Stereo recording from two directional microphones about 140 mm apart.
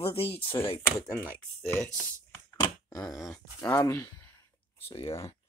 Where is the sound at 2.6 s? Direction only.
25° left (ahead or behind).